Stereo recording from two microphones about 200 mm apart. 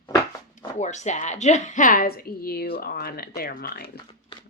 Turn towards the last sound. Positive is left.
turn(degrees=45)  # may be behind; listen again after turning